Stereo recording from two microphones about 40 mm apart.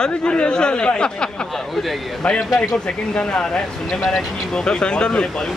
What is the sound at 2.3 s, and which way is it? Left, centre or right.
Speech, centre.